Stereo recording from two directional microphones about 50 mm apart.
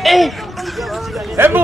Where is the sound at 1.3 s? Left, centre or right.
Right.